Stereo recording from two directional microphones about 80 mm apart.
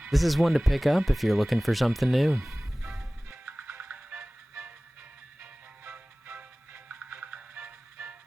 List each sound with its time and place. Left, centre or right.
0.1 s speech: centre
2.8 s music: centre
3.2 s music: right
5.8 s music: right